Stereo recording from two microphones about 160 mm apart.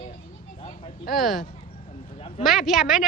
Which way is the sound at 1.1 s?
Centre (ahead or behind).